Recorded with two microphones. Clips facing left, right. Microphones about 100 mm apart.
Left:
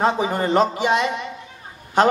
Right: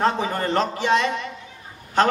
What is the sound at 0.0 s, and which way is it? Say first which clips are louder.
A man's voice: left 2 dB; 15° left (ahead or behind).